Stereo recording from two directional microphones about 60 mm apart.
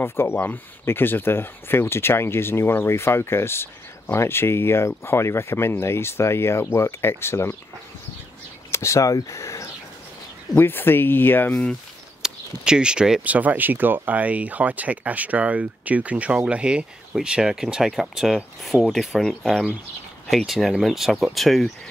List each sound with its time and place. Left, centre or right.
0.0 s speech: left
8.7 s speech: left
10.5 s speech: left
12.2 s speech: centre
13.2 s speech: right; by 21.6 s centre